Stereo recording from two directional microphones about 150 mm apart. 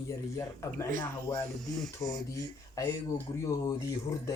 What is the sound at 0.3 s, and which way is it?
Speech, 20° left (ahead or behind).